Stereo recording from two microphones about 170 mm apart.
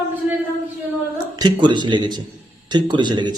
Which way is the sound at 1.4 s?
25° right (ahead or behind).